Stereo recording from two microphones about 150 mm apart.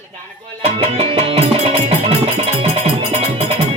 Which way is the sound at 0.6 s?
40° right (ahead or behind).